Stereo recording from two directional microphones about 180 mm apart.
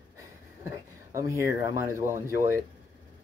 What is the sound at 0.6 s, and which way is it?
Speech, 15° right (ahead or behind).